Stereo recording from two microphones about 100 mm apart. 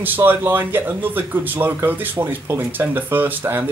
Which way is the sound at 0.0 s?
20° right (ahead or behind).